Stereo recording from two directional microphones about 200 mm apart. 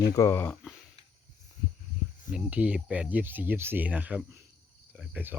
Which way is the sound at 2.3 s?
5° right (ahead or behind).